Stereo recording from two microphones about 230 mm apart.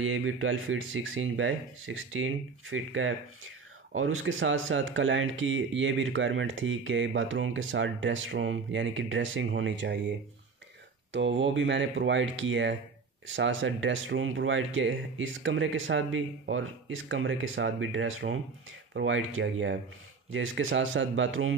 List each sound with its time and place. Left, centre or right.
0.0 s speech: right
11.1 s speech: right